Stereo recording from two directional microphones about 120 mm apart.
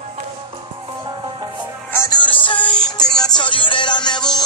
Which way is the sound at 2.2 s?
45° left (ahead or behind).